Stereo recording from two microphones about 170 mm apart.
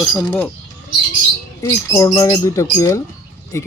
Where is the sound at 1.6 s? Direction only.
25° left (ahead or behind).